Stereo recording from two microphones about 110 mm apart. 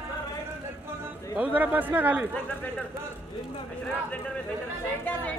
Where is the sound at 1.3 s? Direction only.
15° right (ahead or behind).